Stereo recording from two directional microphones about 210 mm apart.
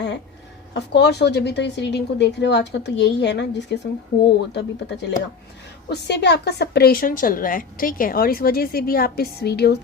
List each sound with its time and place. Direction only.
0.7 s a woman's voice: 55° left (ahead or behind)